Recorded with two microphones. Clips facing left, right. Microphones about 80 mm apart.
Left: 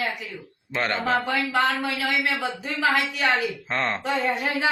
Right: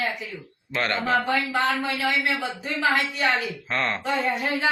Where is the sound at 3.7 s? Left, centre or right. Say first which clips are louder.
Right 1 dB; left.